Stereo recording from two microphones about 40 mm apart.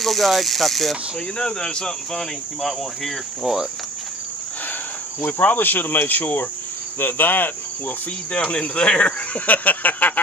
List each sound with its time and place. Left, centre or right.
0.0 s speech: centre
1.4 s speech: centre
5.2 s speech: left
8.3 s speech: left
9.5 s speech: left